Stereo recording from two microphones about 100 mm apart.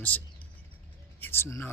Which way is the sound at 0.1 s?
15° left (ahead or behind).